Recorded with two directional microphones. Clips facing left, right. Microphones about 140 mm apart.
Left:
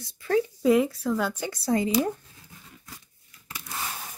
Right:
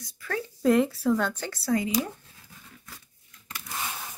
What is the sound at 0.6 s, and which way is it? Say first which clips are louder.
A woman's voice: right 3 dB; centre (ahead or behind).